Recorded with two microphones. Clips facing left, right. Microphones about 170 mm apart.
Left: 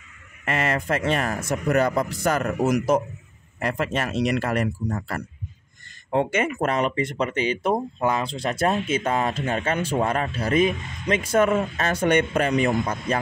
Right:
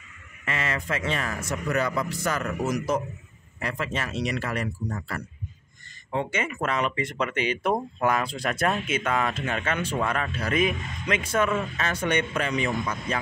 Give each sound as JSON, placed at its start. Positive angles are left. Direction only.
{"t": 0.5, "sound": "speech", "side_deg": 45}
{"t": 7.0, "sound": "speech", "side_deg": 30}